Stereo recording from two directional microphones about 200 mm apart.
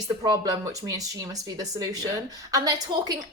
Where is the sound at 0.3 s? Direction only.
20° right (ahead or behind).